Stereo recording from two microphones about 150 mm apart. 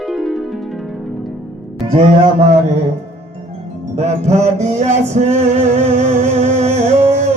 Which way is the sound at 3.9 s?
45° right (ahead or behind).